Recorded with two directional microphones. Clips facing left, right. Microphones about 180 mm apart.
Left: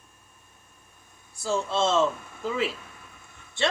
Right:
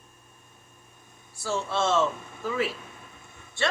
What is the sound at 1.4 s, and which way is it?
Speech, 20° left (ahead or behind).